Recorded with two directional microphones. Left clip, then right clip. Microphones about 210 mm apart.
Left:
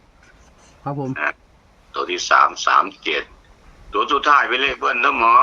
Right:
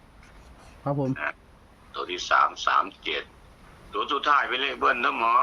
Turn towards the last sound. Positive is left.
turn(degrees=35)  # may be behind; listen again after turning